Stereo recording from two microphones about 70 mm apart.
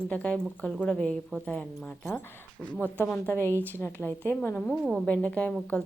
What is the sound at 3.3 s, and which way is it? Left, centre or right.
A woman's voice, left.